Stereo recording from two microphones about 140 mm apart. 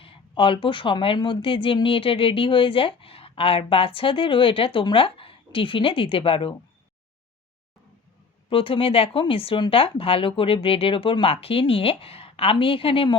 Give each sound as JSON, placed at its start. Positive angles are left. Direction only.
{"t": 0.0, "sound": "speech", "side_deg": 40}
{"t": 8.4, "sound": "speech", "side_deg": 40}